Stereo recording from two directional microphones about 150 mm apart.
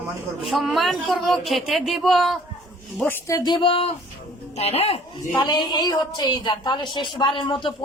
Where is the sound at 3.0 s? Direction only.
15° left (ahead or behind).